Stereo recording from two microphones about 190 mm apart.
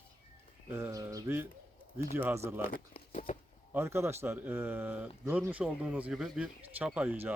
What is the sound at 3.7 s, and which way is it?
Speech, 15° right (ahead or behind).